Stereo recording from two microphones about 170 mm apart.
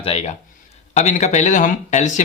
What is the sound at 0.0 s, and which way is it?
Speech, 35° left (ahead or behind).